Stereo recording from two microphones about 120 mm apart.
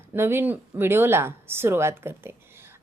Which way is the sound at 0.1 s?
20° right (ahead or behind).